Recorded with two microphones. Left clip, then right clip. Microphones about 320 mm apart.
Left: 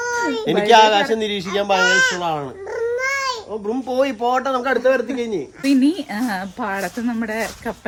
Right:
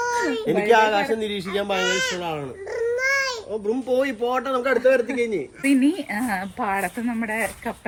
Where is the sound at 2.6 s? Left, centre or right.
Centre.